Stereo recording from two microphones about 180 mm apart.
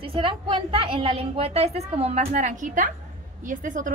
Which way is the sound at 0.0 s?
30° right (ahead or behind).